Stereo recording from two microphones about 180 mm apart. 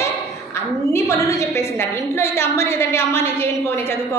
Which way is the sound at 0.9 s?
15° left (ahead or behind).